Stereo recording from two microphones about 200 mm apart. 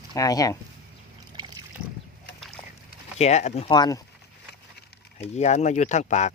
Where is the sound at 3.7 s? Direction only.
20° left (ahead or behind).